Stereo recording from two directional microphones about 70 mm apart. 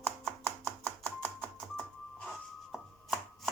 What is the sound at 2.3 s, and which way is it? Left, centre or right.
Chopping, centre.